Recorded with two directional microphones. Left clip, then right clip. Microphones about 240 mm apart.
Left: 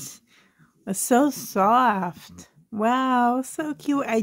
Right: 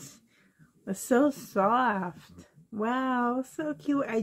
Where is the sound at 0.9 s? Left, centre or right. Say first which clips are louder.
Left 5 dB; left.